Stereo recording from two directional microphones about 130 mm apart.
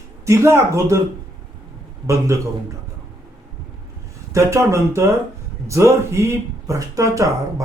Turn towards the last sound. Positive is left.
turn(degrees=-25)  # may be behind; listen again after turning